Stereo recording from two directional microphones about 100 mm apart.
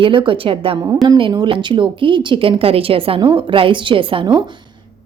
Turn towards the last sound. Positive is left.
turn(degrees=-50)  # may be behind; listen again after turning